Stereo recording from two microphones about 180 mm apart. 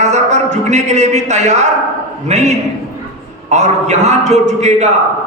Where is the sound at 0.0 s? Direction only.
40° right (ahead or behind).